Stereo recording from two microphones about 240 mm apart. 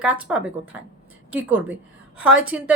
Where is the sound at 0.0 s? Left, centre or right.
Centre.